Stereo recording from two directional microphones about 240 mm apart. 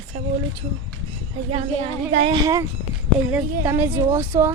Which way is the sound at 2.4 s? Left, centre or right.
Centre.